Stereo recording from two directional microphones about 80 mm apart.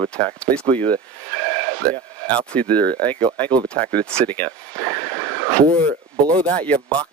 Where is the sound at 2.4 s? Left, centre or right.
Centre.